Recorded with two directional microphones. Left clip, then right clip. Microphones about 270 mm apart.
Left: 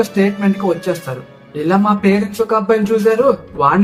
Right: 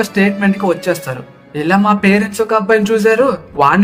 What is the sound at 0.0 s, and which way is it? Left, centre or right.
A man's voice, right.